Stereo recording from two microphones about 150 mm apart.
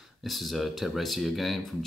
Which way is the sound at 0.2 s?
Centre (ahead or behind).